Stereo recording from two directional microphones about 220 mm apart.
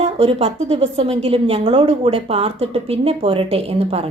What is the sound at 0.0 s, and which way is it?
Speech, 25° right (ahead or behind).